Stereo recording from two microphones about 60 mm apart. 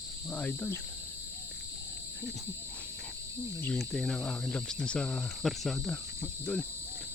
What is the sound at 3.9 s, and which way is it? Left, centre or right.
Cricket, centre.